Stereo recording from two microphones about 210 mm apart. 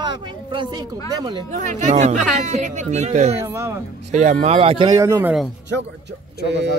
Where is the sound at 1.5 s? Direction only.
35° right (ahead or behind).